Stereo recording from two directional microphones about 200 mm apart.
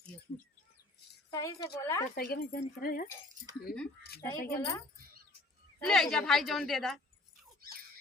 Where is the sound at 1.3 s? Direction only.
20° left (ahead or behind).